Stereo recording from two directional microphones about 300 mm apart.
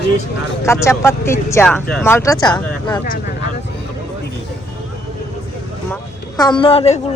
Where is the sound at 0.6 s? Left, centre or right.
Centre.